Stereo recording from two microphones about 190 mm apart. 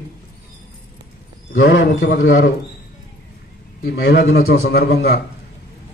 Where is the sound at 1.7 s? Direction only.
65° left (ahead or behind).